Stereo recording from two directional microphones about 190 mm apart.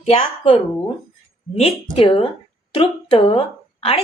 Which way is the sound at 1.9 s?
30° left (ahead or behind).